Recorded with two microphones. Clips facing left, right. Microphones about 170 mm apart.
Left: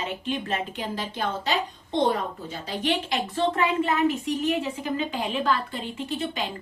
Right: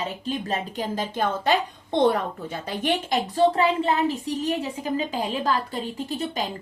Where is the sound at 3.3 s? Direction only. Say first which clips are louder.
Right 4 dB; 35° right (ahead or behind).